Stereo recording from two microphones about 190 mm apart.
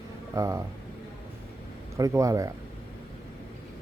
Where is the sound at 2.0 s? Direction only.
15° right (ahead or behind).